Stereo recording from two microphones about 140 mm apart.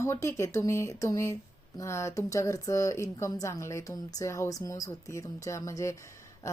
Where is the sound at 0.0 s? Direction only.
20° left (ahead or behind).